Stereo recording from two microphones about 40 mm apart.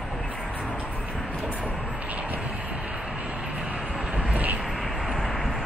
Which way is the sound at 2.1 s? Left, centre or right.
Right.